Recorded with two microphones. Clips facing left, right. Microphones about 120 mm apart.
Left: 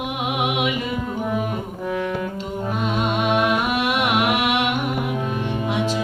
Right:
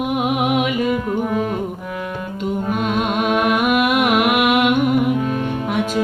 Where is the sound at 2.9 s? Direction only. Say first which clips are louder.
Right 1 dB; 50° right (ahead or behind).